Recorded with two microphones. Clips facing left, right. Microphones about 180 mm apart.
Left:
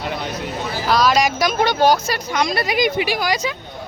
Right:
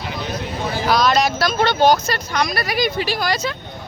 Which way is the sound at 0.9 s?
10° left (ahead or behind).